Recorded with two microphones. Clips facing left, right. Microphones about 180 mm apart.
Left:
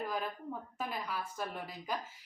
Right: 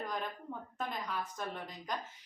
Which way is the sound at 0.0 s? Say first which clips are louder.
Left 2 dB; 5° left (ahead or behind).